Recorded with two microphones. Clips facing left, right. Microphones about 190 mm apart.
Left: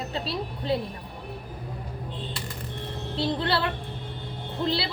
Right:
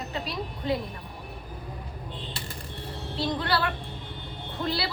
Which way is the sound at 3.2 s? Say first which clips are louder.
Left 1 dB; 25° left (ahead or behind).